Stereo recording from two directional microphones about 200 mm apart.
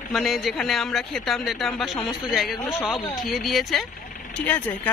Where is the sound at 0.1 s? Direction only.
Centre (ahead or behind).